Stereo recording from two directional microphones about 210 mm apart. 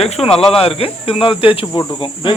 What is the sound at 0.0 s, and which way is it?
Speech, 30° left (ahead or behind).